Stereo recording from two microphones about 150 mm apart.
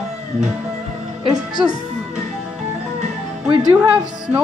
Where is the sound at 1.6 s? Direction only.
5° right (ahead or behind).